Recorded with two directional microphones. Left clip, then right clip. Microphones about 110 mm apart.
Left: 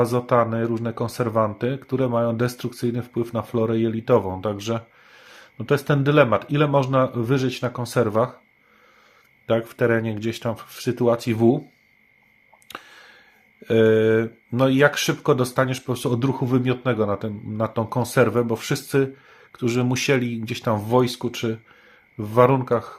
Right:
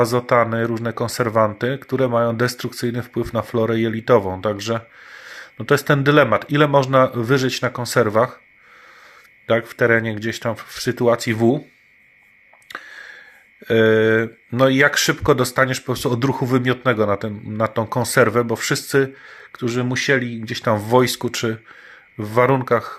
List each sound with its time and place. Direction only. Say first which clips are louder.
0.0 s speech: right 3 dB; 15° right (ahead or behind)
9.5 s speech: right 4 dB; 5° right (ahead or behind)
12.9 s a sound: right 9 dB; centre (ahead or behind)
13.7 s speech: right 2 dB; 10° right (ahead or behind)
19.5 s speech: right 1 dB; 5° left (ahead or behind)
19.9 s speech: right 3 dB; 15° left (ahead or behind)
20.7 s speech: right 4 dB; 15° right (ahead or behind)
22.2 s speech: right 1 dB; 15° right (ahead or behind)